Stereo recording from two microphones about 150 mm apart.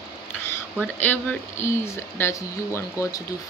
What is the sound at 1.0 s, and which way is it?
Speech, 15° left (ahead or behind).